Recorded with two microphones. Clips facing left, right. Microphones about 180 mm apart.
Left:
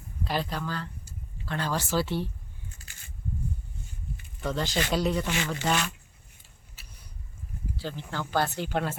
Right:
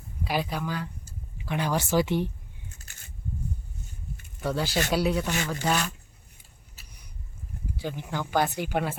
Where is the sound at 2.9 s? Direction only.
45° right (ahead or behind).